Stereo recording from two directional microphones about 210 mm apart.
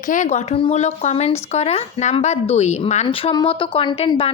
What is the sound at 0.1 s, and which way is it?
Speech, 35° left (ahead or behind).